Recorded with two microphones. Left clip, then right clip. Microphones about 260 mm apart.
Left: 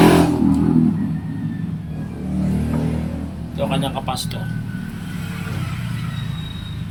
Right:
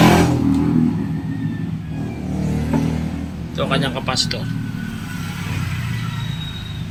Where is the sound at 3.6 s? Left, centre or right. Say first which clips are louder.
Right 2 dB; right.